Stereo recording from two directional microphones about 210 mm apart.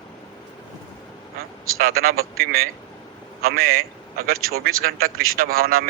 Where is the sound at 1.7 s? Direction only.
45° right (ahead or behind).